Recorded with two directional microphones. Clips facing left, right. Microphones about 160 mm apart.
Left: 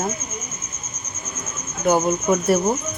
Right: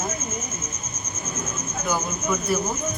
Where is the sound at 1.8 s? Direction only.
65° left (ahead or behind).